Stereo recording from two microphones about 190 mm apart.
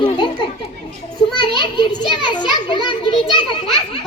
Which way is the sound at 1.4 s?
25° left (ahead or behind).